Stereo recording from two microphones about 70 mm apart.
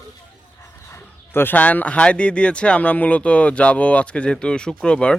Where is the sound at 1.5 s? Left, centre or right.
Left.